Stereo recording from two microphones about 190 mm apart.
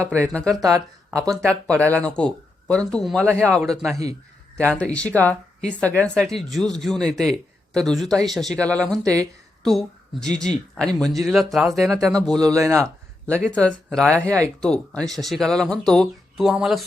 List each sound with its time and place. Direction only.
0.1 s speech: 5° left (ahead or behind)
0.6 s speech: 15° right (ahead or behind)
1.2 s speech: 5° left (ahead or behind)
12.4 s speech: 15° right (ahead or behind)
13.5 s speech: 5° left (ahead or behind)